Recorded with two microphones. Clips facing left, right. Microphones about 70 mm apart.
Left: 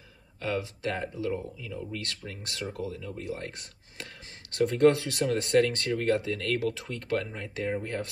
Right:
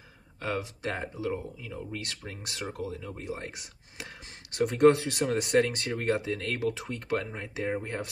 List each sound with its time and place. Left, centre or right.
0.4 s speech: right